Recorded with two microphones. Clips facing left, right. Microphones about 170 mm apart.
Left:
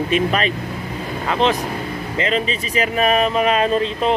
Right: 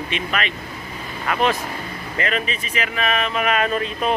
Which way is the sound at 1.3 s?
20° left (ahead or behind).